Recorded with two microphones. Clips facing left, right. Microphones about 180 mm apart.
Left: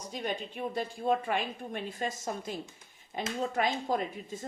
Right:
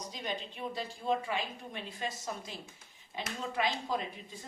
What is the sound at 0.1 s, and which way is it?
A woman's voice, 50° left (ahead or behind).